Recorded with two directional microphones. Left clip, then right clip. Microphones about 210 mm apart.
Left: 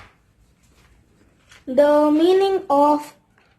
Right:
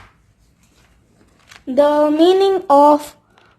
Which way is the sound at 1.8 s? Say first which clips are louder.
Right 2 dB; 50° right (ahead or behind).